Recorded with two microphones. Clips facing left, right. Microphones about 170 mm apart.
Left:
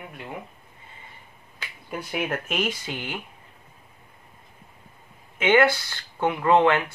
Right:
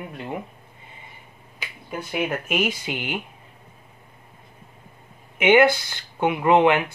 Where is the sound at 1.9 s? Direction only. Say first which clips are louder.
Right 2 dB; centre (ahead or behind); by 3.2 s 20° right (ahead or behind).